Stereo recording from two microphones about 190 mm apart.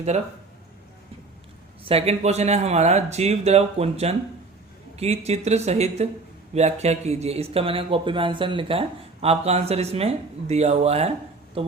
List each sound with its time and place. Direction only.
1.8 s speech: 30° right (ahead or behind)